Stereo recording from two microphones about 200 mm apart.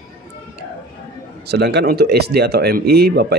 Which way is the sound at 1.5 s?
55° right (ahead or behind).